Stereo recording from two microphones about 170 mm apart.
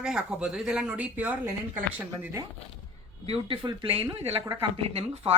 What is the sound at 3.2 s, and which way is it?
Speech, 35° right (ahead or behind).